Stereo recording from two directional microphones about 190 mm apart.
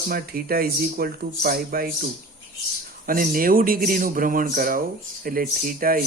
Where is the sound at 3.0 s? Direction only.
50° right (ahead or behind).